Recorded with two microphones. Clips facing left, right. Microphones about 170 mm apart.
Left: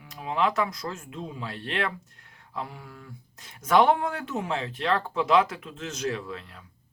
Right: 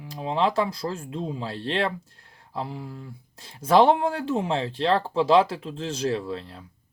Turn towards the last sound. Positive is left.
turn(degrees=-30)  # may be behind; listen again after turning